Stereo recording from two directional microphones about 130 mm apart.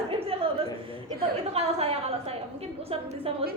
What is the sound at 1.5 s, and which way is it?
A woman's voice, 50° right (ahead or behind).